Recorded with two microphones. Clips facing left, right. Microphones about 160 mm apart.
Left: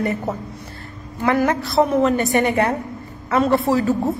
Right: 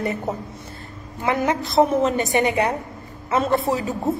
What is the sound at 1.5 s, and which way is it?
A woman's voice, 20° right (ahead or behind).